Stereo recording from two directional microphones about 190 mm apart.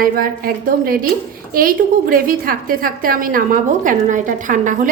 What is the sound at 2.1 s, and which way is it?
A woman's voice, 50° right (ahead or behind).